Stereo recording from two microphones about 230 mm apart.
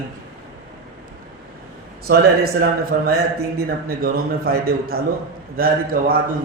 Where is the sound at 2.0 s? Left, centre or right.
Right.